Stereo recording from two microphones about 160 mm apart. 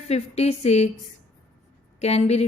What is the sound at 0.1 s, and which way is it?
Speech, 40° left (ahead or behind).